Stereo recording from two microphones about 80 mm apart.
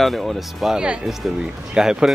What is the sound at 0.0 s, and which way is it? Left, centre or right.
Speech, centre.